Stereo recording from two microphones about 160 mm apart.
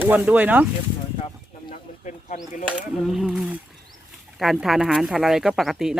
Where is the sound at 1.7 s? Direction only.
55° left (ahead or behind).